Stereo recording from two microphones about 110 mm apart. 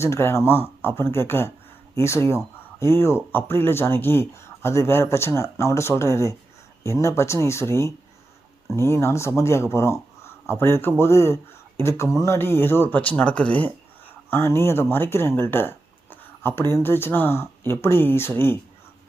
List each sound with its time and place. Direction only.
0.0 s speech: 25° left (ahead or behind)